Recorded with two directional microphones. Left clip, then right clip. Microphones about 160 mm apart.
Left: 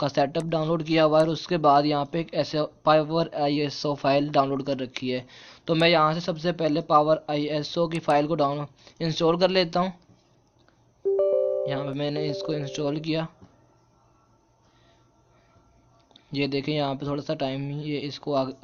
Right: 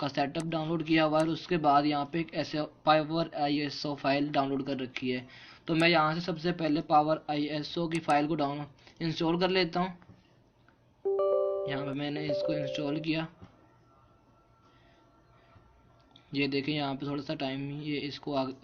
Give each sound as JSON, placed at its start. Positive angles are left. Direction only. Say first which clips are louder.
{"t": 0.0, "sound": "speech", "louder": "left 7 dB", "side_deg": 50}
{"t": 11.6, "sound": "speech", "louder": "left 6 dB", "side_deg": 45}
{"t": 16.1, "sound": "speech", "louder": "left 3 dB", "side_deg": 50}